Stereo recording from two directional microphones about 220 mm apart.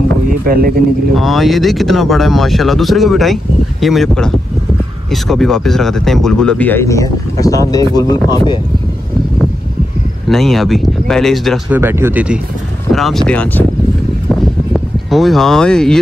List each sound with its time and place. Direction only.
0.5 s speech: 40° right (ahead or behind)
1.1 s speech: centre (ahead or behind); by 8.5 s 15° left (ahead or behind)
10.3 s speech: centre (ahead or behind)
11.8 s speech: 10° right (ahead or behind); by 13.7 s 5° left (ahead or behind)
14.3 s a sound: centre (ahead or behind)